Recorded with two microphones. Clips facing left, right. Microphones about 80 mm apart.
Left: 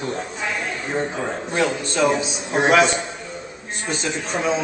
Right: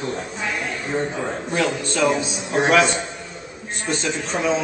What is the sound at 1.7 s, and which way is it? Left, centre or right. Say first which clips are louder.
Speech: left 1 dB; centre.